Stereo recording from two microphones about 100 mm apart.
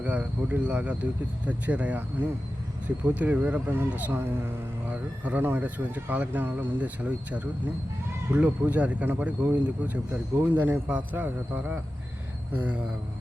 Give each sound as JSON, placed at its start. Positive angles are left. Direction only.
{"t": 0.0, "sound": "speech", "side_deg": -15}